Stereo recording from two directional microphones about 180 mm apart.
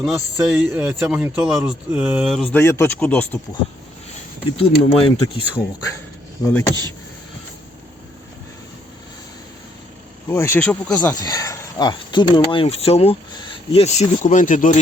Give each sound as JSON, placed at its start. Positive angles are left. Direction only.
{"t": 0.0, "sound": "speech", "side_deg": -5}
{"t": 0.8, "sound": "speech", "side_deg": -15}
{"t": 2.5, "sound": "speech", "side_deg": 15}
{"t": 4.5, "sound": "speech", "side_deg": 35}
{"t": 6.5, "sound": "speech", "side_deg": 10}
{"t": 10.3, "sound": "speech", "side_deg": 15}
{"t": 11.1, "sound": "speech", "side_deg": 20}